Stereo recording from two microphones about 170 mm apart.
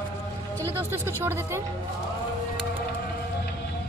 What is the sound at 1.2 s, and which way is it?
Speech, 15° right (ahead or behind).